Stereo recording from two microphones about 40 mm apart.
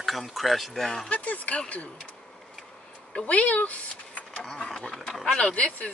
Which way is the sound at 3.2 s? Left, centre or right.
Left.